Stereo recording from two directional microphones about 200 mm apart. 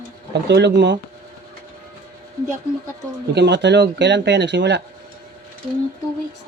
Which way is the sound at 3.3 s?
60° right (ahead or behind).